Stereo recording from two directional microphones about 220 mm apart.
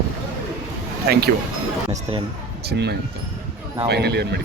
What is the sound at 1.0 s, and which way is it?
Speech, 45° right (ahead or behind).